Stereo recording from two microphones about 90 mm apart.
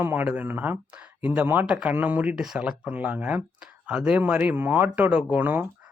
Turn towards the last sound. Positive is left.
turn(degrees=-20)  # may be behind; listen again after turning